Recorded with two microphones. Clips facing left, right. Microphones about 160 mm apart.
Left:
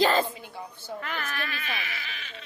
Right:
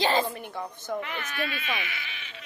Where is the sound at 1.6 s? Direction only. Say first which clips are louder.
Right 2 dB; 40° left (ahead or behind).